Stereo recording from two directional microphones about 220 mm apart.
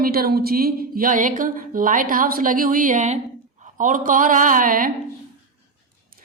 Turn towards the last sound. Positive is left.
turn(degrees=-40)  # may be behind; listen again after turning